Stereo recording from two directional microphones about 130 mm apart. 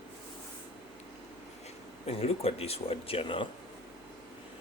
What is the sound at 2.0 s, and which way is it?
Speech, 50° left (ahead or behind).